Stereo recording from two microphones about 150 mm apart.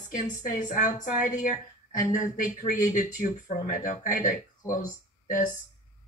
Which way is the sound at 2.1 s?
60° left (ahead or behind).